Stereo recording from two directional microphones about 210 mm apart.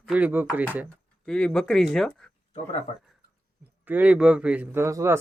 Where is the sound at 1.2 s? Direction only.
5° left (ahead or behind).